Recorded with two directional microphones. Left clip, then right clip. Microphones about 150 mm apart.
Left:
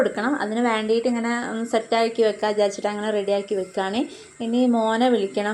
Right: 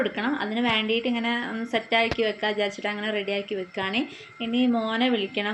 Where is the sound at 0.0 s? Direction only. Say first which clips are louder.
Left 4 dB; 15° right (ahead or behind).